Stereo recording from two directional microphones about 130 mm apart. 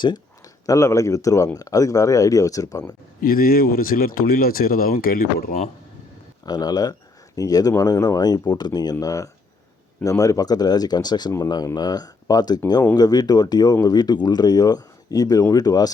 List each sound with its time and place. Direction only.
0.0 s speech: 30° left (ahead or behind)
3.2 s speech: 90° left
6.4 s speech: 30° left (ahead or behind)